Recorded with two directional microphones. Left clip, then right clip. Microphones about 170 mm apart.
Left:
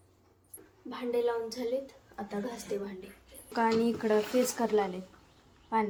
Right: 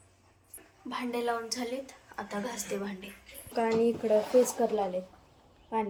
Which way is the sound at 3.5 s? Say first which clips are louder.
Right 1 dB; 40° left (ahead or behind).